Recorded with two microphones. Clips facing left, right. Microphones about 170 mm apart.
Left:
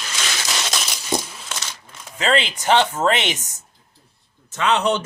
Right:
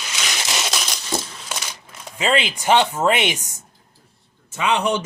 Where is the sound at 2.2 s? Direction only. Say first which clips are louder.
Even; 10° right (ahead or behind).